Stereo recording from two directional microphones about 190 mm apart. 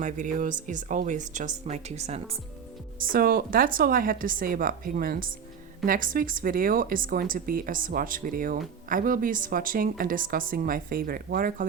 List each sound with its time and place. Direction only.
0.0 s speech: 40° right (ahead or behind)
3.0 s speech: 50° right (ahead or behind)